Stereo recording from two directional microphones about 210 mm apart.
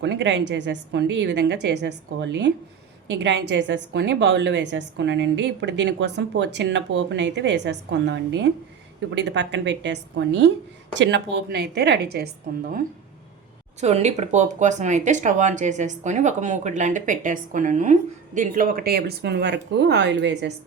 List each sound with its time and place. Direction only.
0.0 s a woman's voice: 60° right (ahead or behind)
13.7 s speech: 30° right (ahead or behind); by 20.5 s 55° right (ahead or behind)